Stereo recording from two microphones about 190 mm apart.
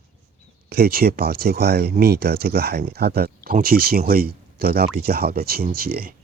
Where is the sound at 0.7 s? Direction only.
55° right (ahead or behind).